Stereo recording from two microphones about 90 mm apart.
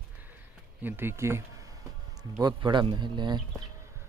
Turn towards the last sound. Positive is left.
turn(degrees=-55)  # may be behind; listen again after turning